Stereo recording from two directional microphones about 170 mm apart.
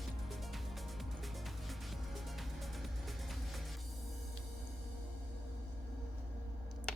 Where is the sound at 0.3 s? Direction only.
Centre (ahead or behind).